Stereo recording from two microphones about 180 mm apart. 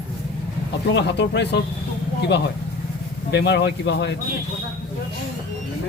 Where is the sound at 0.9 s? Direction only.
70° left (ahead or behind).